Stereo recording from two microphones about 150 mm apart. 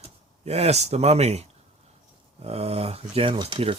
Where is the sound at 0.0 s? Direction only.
45° right (ahead or behind).